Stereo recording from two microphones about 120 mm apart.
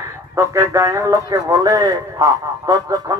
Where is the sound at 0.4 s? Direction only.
25° right (ahead or behind).